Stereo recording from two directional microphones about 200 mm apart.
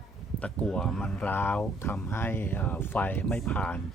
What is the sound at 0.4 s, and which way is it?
Speech, 5° left (ahead or behind).